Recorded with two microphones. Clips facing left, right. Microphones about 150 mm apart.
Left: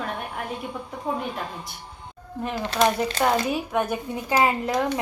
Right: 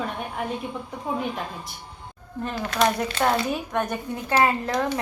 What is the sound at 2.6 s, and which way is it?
Speech, 25° left (ahead or behind).